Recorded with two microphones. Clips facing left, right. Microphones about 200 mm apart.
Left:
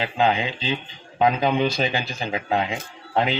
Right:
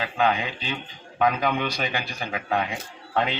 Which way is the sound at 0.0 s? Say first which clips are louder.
Left 2 dB; 25° left (ahead or behind).